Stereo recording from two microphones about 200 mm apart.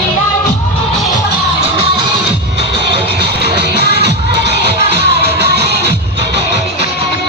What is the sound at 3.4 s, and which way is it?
Music, 55° right (ahead or behind).